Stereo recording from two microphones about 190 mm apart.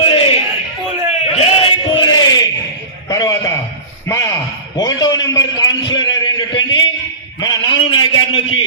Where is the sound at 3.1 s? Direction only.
20° left (ahead or behind).